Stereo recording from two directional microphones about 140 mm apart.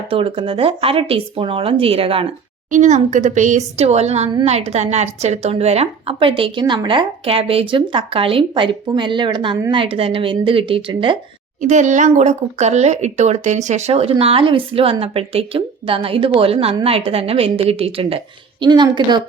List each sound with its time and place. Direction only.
0.1 s a woman's voice: 40° right (ahead or behind)
2.6 s a woman's voice: 60° right (ahead or behind); by 11.2 s 40° right (ahead or behind)
11.6 s a woman's voice: 60° right (ahead or behind); by 19.2 s 30° right (ahead or behind)